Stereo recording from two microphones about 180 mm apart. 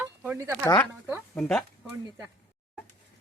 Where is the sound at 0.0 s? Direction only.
10° right (ahead or behind).